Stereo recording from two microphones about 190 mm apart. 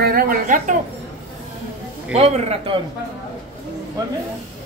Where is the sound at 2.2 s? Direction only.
35° right (ahead or behind).